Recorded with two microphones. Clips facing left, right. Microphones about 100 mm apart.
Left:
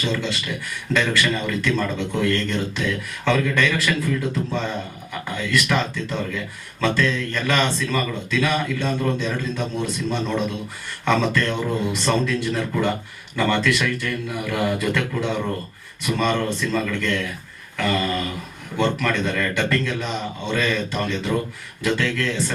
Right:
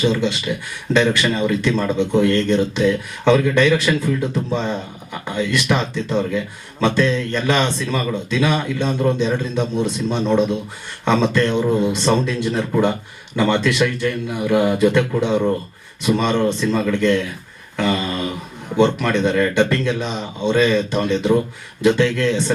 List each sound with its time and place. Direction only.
0.0 s speech: 20° right (ahead or behind)